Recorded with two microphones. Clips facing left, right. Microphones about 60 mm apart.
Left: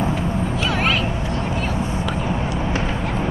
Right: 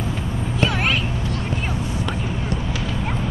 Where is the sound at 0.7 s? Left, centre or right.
Centre.